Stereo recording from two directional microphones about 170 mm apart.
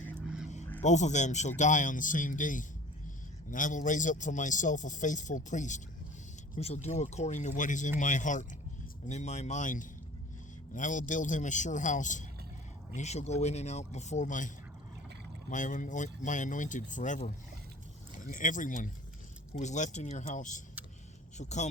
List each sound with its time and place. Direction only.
0.8 s a man's voice: 45° left (ahead or behind)